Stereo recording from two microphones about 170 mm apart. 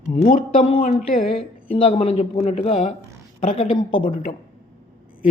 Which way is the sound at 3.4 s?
50° left (ahead or behind).